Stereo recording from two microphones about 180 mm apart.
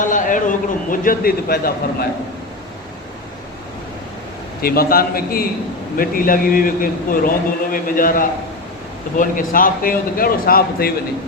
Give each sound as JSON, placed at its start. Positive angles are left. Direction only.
{"t": 0.0, "sound": "a man's voice", "side_deg": 45}
{"t": 4.6, "sound": "a man's voice", "side_deg": 55}